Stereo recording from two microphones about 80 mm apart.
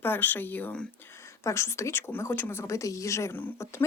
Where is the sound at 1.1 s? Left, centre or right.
Left.